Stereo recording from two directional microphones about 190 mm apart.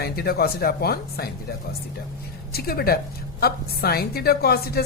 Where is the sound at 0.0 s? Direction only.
55° left (ahead or behind).